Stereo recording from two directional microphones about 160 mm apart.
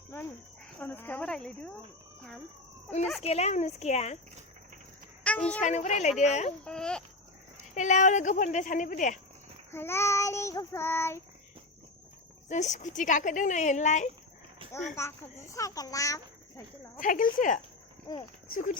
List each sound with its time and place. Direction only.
0.8 s child singing: 10° left (ahead or behind)
3.2 s a woman's voice: 40° left (ahead or behind)
5.2 s music: 10° left (ahead or behind)
5.6 s a woman's voice: 45° left (ahead or behind)
6.7 s speech: 5° left (ahead or behind)
7.8 s a woman's voice: 50° left (ahead or behind)
9.7 s child singing: 15° left (ahead or behind)
12.5 s a woman's voice: 50° left (ahead or behind)
14.6 s a sound: 35° right (ahead or behind)
14.9 s a child's voice: 15° left (ahead or behind)
17.0 s speech: 55° left (ahead or behind)
18.1 s a child's voice: 25° left (ahead or behind)
18.5 s speech: 60° left (ahead or behind)